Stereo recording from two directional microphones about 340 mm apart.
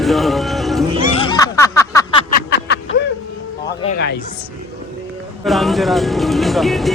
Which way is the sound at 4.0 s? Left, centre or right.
Left.